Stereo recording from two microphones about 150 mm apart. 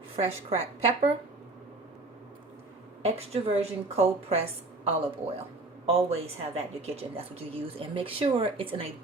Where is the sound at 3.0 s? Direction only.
45° right (ahead or behind).